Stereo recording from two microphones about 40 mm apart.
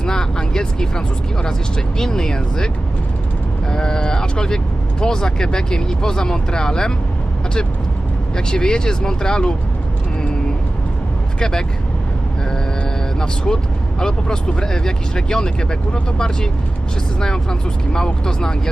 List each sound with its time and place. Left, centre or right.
0.0 s speech: centre
3.7 s speech: centre
8.4 s speech: centre
11.3 s speech: centre
13.1 s speech: centre